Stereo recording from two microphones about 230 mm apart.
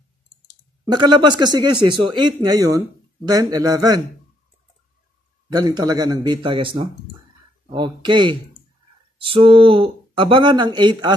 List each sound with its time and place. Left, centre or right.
0.8 s a man's voice: centre
5.5 s a man's voice: centre